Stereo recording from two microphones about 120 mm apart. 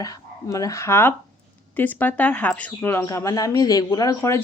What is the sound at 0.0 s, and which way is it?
Speech, 30° left (ahead or behind).